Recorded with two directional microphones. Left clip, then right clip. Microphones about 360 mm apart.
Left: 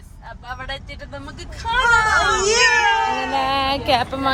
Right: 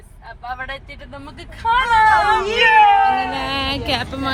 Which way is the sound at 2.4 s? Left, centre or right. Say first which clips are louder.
Right 6 dB; centre.